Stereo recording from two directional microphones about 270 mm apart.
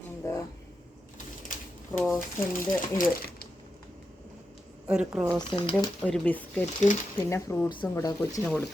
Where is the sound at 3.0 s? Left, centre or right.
Left.